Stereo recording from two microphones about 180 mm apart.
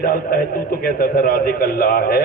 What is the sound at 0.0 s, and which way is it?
A man's voice, 50° left (ahead or behind).